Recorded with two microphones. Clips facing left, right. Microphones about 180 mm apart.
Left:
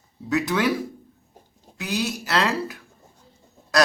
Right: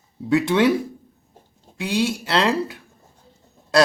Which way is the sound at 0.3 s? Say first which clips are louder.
Right 5 dB; 25° right (ahead or behind).